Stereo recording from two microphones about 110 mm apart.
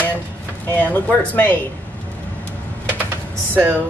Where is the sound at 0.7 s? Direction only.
15° left (ahead or behind).